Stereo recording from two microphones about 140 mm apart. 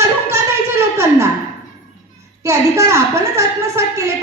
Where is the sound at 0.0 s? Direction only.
20° right (ahead or behind).